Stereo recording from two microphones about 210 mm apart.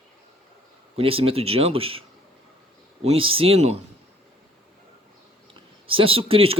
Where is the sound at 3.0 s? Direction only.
25° right (ahead or behind).